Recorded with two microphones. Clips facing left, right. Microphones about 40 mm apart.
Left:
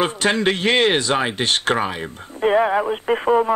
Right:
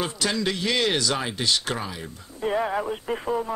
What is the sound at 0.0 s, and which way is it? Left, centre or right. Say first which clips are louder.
Speech: left 7 dB; left.